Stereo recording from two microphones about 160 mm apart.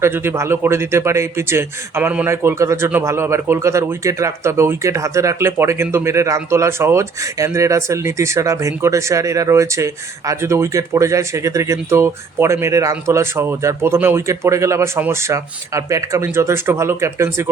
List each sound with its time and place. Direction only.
0.0 s a man's voice: 15° right (ahead or behind)